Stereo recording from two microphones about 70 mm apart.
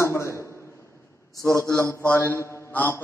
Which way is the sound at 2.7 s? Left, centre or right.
Left.